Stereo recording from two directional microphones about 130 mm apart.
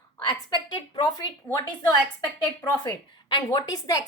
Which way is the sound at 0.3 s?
30° left (ahead or behind).